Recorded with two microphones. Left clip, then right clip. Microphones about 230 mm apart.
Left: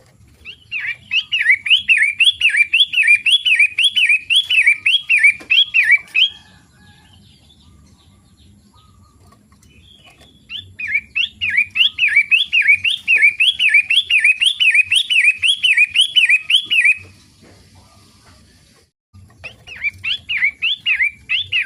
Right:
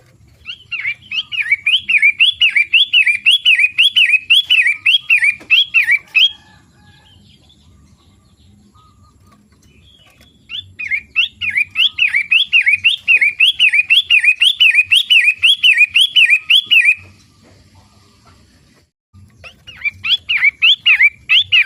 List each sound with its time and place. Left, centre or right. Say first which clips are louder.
0.4 s a sound: right 2 dB; centre
2.1 s bird: right 1 dB; centre
10.5 s bird: even; centre
19.4 s pig: right 1 dB; centre
19.9 s bird: right 7 dB; centre